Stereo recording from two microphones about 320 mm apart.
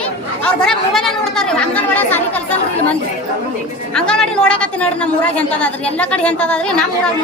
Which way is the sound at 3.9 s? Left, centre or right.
Centre.